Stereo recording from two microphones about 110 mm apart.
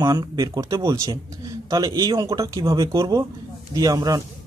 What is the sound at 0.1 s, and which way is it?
A man's voice, 35° right (ahead or behind).